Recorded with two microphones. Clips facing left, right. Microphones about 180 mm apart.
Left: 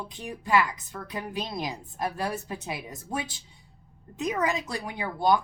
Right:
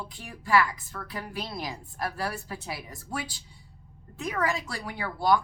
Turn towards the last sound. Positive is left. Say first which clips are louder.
# left 1 dB
turn(degrees=20)  # may be behind; listen again after turning